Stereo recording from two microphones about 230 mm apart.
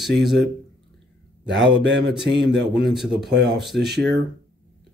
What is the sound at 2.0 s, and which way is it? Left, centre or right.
Speech, centre.